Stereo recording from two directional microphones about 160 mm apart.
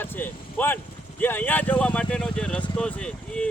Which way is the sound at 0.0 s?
10° left (ahead or behind).